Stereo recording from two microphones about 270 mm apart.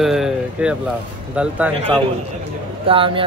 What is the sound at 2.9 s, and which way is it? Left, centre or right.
Speech, centre.